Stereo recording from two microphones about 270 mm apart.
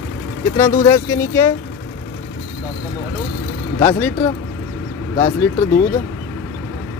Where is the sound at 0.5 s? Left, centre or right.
Centre.